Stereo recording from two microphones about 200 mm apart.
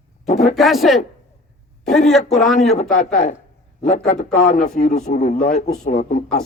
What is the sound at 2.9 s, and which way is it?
A man's voice, 40° left (ahead or behind).